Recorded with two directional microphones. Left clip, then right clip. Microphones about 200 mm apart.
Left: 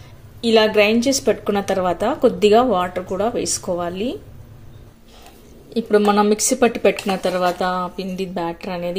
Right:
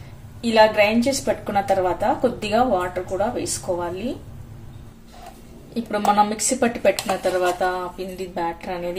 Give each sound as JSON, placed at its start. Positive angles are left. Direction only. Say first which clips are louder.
{"t": 0.4, "sound": "a woman's voice", "louder": "left 1 dB", "side_deg": 40}
{"t": 5.9, "sound": "a woman's voice", "louder": "left 3 dB", "side_deg": 30}